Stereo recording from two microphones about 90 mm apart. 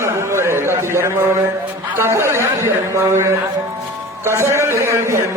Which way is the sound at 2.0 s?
30° right (ahead or behind).